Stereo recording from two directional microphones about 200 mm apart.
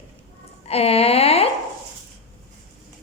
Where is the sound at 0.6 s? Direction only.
30° left (ahead or behind).